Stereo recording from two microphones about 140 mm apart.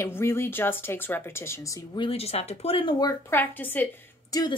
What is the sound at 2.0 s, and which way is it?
Speech, 45° left (ahead or behind).